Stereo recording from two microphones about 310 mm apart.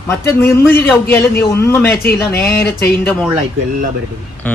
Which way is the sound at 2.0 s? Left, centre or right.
Left.